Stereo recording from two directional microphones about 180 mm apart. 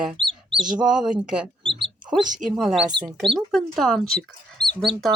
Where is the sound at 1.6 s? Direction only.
30° right (ahead or behind).